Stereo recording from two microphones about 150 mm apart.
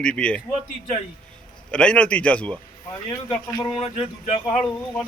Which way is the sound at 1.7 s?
5° left (ahead or behind).